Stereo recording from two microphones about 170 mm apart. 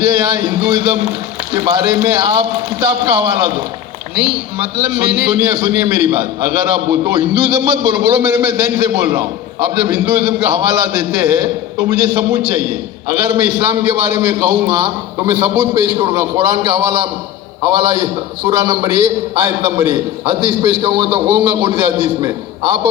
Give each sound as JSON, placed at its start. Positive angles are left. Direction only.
{"t": 0.0, "sound": "a man's voice", "side_deg": -30}